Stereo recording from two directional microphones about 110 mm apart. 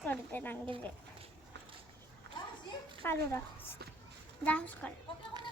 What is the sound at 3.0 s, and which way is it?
A woman's voice, 20° left (ahead or behind).